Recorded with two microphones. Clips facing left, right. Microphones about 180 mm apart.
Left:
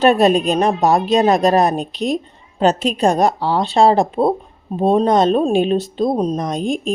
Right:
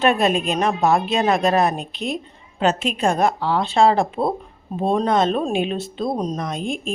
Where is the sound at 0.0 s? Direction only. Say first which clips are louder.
Left 5 dB; 35° left (ahead or behind).